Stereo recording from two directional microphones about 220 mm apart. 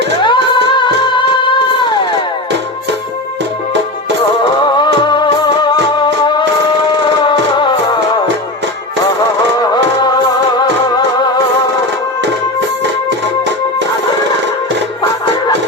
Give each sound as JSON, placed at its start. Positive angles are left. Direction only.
{"t": 0.2, "sound": "music", "side_deg": 20}
{"t": 4.6, "sound": "music", "side_deg": 20}
{"t": 9.6, "sound": "music", "side_deg": 20}